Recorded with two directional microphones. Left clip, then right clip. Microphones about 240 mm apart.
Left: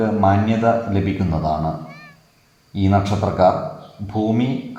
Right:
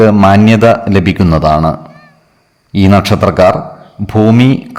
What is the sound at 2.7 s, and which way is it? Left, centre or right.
A man's voice, right.